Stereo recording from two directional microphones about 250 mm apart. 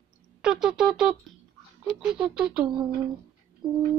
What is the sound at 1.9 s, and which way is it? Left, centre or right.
Speech, centre.